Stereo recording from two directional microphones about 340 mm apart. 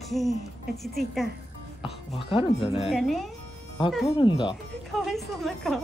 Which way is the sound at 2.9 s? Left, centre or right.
Centre.